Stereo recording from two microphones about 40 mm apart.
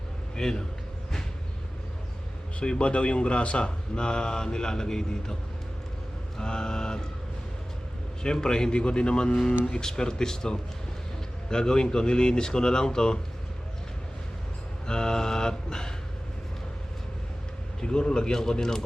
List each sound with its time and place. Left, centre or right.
0.3 s a man's voice: centre
2.6 s speech: left
8.2 s speech: centre
14.8 s mantra: centre
17.7 s speech: centre